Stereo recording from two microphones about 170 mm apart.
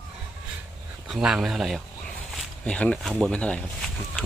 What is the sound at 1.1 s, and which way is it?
Speech, 5° right (ahead or behind).